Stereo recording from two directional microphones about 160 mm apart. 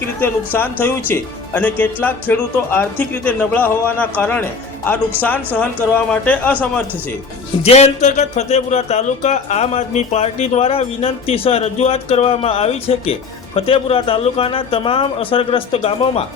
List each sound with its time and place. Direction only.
0.2 s speech: 15° left (ahead or behind)
6.1 s speech: 10° left (ahead or behind)
7.6 s a man's voice: 40° left (ahead or behind)